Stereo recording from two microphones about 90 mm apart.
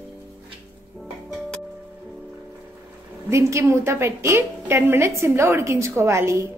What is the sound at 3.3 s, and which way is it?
A woman's voice, 35° right (ahead or behind).